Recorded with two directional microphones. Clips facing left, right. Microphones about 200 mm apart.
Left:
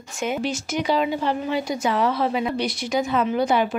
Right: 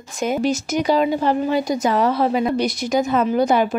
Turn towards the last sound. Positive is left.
turn(degrees=-40)  # may be behind; listen again after turning